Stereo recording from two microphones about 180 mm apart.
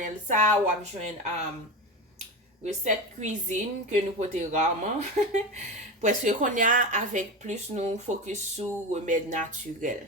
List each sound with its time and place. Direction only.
0.3 s speech: 40° right (ahead or behind)
2.8 s a woman's voice: 40° right (ahead or behind)